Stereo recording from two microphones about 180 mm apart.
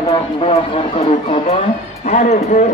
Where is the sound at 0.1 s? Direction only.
35° left (ahead or behind).